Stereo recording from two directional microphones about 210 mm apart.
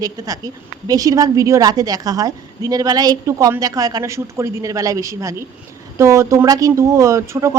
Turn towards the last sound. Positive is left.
turn(degrees=-15)  # may be behind; listen again after turning